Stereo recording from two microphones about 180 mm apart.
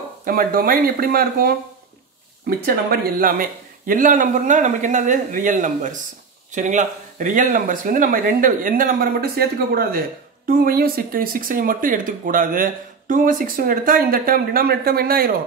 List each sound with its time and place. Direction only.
0.2 s speech: 55° right (ahead or behind)
2.6 s speech: 55° right (ahead or behind)